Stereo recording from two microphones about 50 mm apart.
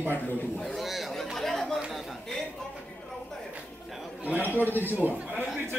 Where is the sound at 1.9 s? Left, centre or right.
Centre.